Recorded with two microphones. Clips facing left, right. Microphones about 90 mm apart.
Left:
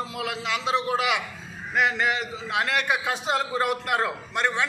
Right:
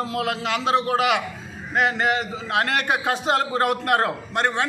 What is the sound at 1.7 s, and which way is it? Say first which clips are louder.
A man's voice: right 3 dB; 40° right (ahead or behind).